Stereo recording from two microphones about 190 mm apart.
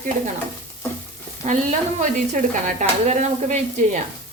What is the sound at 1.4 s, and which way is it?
A woman's voice, 40° right (ahead or behind).